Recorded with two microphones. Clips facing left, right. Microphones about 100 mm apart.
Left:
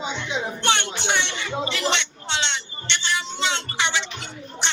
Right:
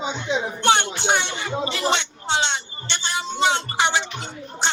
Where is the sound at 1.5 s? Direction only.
20° right (ahead or behind).